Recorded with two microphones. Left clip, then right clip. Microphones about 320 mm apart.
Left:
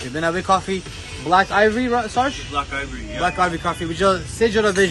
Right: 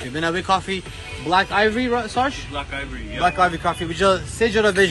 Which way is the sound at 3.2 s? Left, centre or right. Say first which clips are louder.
Right 2 dB; centre.